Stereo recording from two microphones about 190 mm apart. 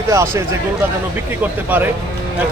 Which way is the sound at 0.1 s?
15° right (ahead or behind).